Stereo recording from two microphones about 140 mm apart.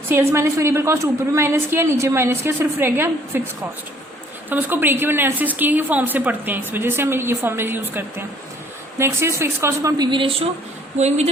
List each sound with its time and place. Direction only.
0.1 s a woman's voice: 20° right (ahead or behind)
4.4 s a woman's voice: 15° right (ahead or behind)
10.1 s speech: 40° right (ahead or behind)
10.9 s a woman's voice: 55° right (ahead or behind)